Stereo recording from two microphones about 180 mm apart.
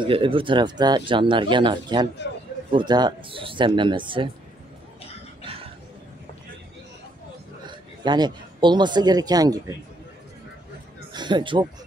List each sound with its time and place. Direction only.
0.0 s speech: 30° right (ahead or behind)
7.6 s a man's voice: 25° right (ahead or behind)
11.1 s speech: 25° right (ahead or behind)